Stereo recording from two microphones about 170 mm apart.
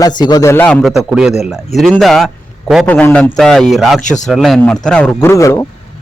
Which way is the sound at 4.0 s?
45° left (ahead or behind).